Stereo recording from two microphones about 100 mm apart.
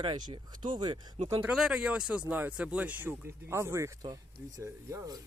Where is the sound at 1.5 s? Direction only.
10° right (ahead or behind); by 3.9 s 30° right (ahead or behind).